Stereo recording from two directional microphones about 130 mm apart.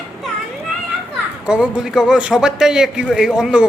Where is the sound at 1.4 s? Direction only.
5° right (ahead or behind).